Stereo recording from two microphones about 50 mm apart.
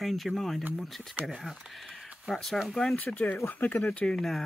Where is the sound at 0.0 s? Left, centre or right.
Centre.